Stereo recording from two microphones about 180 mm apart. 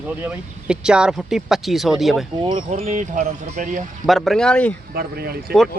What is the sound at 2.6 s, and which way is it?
Speech, 45° right (ahead or behind).